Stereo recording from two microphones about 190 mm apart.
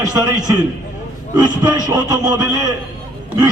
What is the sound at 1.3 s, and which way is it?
A man's voice, 20° right (ahead or behind).